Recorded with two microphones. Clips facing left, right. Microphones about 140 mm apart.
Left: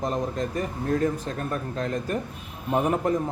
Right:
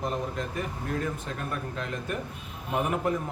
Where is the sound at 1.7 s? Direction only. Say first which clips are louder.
Left 5 dB; 35° left (ahead or behind).